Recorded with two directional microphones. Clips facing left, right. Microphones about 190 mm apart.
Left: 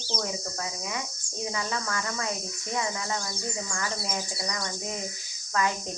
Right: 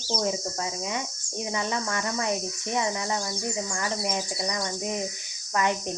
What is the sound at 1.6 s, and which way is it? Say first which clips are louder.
Speech: right 4 dB; 25° right (ahead or behind).